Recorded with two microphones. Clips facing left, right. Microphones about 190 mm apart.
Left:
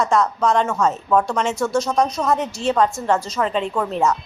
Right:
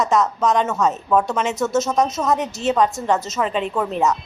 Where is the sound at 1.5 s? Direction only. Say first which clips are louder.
Even; 20° right (ahead or behind).